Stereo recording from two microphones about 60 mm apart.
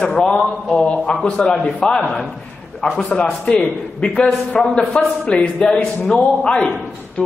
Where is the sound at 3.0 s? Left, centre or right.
Centre.